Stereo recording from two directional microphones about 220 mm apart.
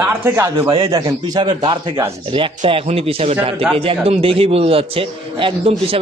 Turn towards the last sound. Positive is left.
turn(degrees=-25)  # may be behind; listen again after turning